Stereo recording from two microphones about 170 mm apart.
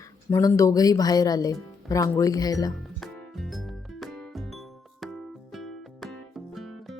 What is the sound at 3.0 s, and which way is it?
Music, centre (ahead or behind).